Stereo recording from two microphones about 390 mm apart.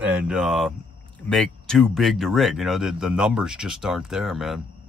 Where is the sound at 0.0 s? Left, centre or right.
Centre.